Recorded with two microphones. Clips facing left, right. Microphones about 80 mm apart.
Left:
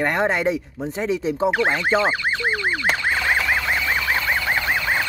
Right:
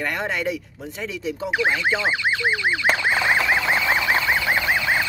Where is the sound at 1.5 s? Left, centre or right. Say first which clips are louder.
Left 1 dB; left.